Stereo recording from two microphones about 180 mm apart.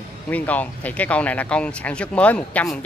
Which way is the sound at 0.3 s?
10° left (ahead or behind).